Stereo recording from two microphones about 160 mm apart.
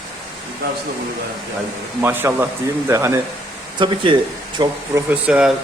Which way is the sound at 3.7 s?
30° right (ahead or behind).